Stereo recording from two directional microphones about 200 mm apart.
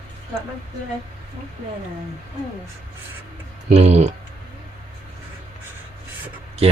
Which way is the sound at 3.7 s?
35° right (ahead or behind).